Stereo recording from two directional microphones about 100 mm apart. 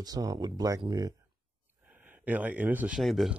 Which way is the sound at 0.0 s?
35° right (ahead or behind).